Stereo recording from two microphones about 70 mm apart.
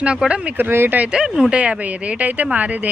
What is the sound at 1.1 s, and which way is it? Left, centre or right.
Speech, centre.